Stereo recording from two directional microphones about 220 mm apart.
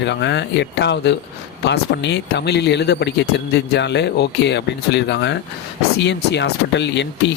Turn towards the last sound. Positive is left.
turn(degrees=50)  # may be behind; listen again after turning